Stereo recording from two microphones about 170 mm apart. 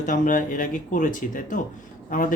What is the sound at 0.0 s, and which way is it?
Speech, 50° left (ahead or behind).